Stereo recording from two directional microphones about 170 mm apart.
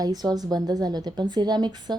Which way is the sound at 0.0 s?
20° right (ahead or behind).